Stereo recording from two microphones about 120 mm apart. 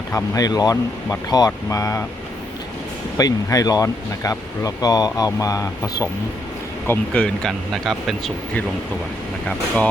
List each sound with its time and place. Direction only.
0.1 s speech: 25° left (ahead or behind)
3.2 s speech: 30° left (ahead or behind)
6.8 s speech: 15° left (ahead or behind)
9.5 s speech: 10° left (ahead or behind)